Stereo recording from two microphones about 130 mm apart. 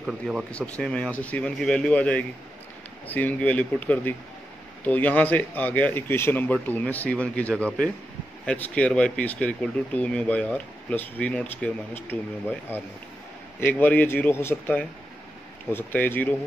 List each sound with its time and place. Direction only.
0.0 s speech: 10° right (ahead or behind)
0.5 s speech: 10° left (ahead or behind)